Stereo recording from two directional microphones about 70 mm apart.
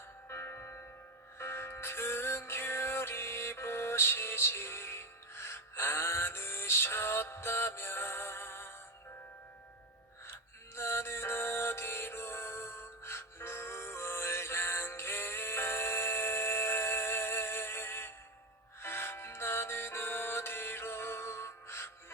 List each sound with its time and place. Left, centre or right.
0.3 s music: left
10.8 s music: left